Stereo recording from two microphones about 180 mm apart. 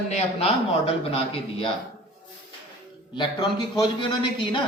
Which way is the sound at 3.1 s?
25° left (ahead or behind).